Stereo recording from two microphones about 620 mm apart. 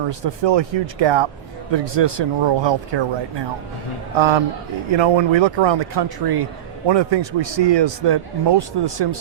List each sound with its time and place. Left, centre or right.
0.1 s a man's voice: right
4.2 s a man's voice: right